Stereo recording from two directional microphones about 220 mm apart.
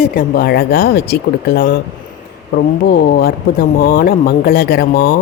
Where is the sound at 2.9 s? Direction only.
45° left (ahead or behind).